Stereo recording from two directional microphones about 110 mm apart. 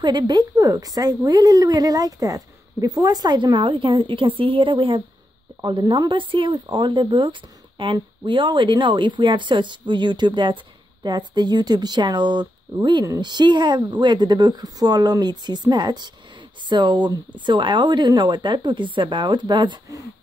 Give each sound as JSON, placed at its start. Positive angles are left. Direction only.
{"t": 0.0, "sound": "a woman's voice", "side_deg": -40}